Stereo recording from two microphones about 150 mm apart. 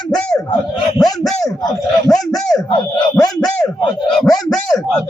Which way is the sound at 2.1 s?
Centre (ahead or behind).